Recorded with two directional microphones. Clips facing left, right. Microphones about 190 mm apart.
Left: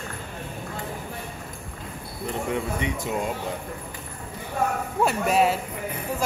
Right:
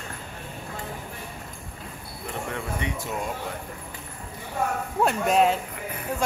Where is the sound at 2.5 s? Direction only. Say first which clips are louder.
Left 4 dB; 15° left (ahead or behind).